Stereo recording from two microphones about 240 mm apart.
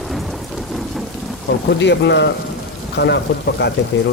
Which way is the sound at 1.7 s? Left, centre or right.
Left.